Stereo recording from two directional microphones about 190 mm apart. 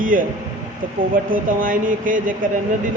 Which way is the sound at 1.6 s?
45° right (ahead or behind).